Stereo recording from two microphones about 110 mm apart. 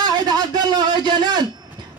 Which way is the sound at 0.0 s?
40° right (ahead or behind).